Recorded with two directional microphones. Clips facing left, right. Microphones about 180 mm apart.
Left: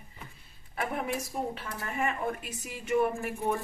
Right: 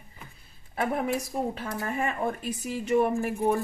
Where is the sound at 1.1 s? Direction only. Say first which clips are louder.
Right 4 dB; 40° right (ahead or behind).